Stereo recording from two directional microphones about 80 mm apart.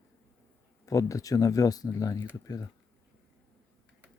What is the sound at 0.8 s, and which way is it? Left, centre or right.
Speech, left.